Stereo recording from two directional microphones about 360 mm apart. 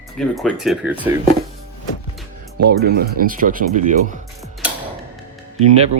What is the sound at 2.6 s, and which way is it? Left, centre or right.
Speech, right.